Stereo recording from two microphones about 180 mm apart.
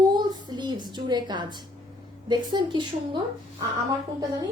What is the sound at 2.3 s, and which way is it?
Speech, 25° right (ahead or behind).